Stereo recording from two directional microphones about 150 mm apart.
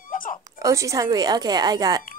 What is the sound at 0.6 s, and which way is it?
Speech, 20° right (ahead or behind).